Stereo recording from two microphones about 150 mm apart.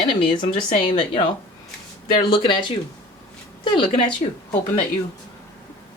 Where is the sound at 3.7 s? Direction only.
35° left (ahead or behind).